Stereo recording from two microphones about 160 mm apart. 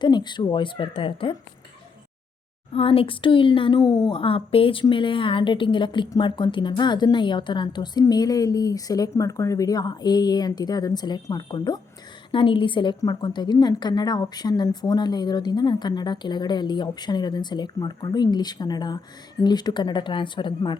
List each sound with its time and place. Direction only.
0.0 s a woman's voice: 30° left (ahead or behind)
2.7 s a woman's voice: 35° left (ahead or behind)